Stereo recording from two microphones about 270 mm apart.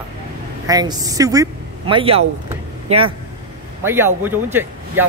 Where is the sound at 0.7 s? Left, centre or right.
Centre.